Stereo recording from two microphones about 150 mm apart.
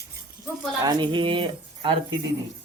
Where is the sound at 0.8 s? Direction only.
30° right (ahead or behind).